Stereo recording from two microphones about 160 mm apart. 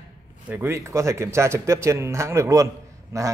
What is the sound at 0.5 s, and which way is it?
A man's voice, 15° right (ahead or behind).